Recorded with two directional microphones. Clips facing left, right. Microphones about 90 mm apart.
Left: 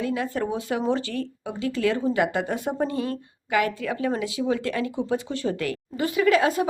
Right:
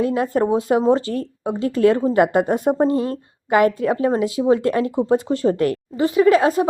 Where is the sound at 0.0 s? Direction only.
40° right (ahead or behind).